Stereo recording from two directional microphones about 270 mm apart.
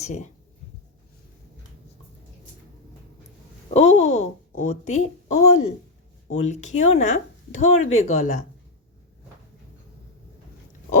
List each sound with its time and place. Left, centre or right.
0.0 s speech: left
3.7 s speech: left